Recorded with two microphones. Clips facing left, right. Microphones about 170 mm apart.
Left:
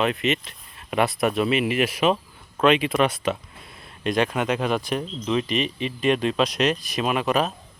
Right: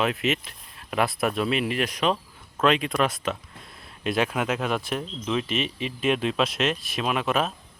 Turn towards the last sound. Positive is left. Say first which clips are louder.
# left 3 dB
turn(degrees=0)  # may be behind; listen again after turning